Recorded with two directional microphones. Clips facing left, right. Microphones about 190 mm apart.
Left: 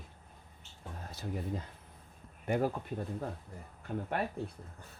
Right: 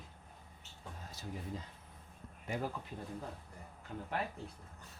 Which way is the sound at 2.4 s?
55° left (ahead or behind).